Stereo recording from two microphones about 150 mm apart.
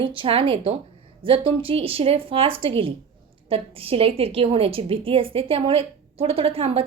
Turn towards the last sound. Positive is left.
turn(degrees=-40)  # may be behind; listen again after turning